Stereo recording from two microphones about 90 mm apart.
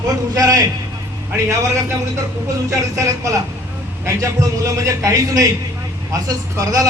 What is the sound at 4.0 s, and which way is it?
A man's voice, 35° right (ahead or behind).